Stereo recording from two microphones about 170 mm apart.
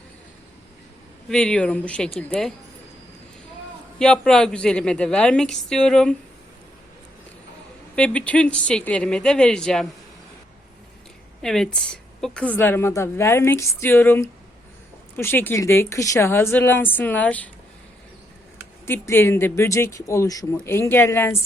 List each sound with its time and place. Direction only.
1.3 s a woman's voice: 5° left (ahead or behind)
3.9 s a woman's voice: 5° left (ahead or behind)
7.9 s a woman's voice: 5° left (ahead or behind)
11.4 s a woman's voice: 5° left (ahead or behind)
18.9 s a woman's voice: 15° left (ahead or behind)